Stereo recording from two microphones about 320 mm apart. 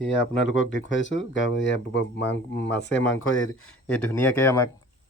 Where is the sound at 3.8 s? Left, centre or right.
Centre.